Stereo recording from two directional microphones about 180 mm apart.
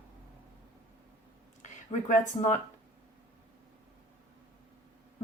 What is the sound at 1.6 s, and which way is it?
Speech, 45° left (ahead or behind).